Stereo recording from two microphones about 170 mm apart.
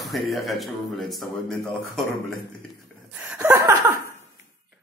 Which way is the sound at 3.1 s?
10° right (ahead or behind).